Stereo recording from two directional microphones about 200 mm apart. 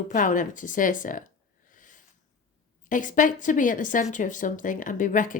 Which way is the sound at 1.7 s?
40° left (ahead or behind).